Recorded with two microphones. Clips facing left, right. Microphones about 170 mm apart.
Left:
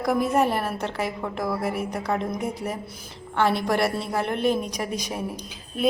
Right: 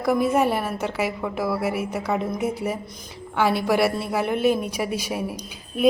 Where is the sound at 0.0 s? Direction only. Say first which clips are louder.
Right 2 dB; centre (ahead or behind).